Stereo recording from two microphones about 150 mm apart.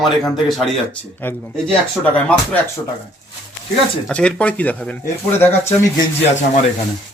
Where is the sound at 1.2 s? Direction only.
15° left (ahead or behind).